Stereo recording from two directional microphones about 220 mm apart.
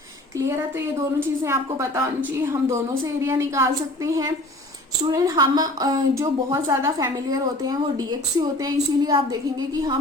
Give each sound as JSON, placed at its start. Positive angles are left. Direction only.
{"t": 0.3, "sound": "a woman's voice", "side_deg": -15}